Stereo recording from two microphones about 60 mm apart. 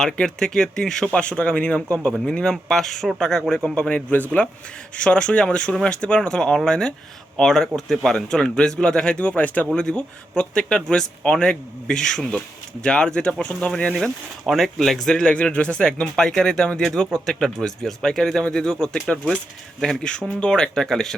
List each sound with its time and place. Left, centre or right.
0.0 s speech: centre
3.8 s speech: left
14.4 s speech: centre
15.2 s speech: centre